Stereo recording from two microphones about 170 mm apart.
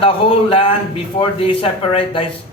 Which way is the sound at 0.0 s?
35° left (ahead or behind).